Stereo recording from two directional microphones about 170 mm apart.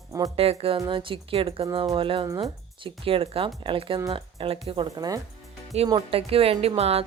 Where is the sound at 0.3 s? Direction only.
35° right (ahead or behind).